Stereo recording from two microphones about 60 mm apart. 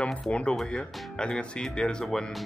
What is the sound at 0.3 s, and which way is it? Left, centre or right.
Speech, centre.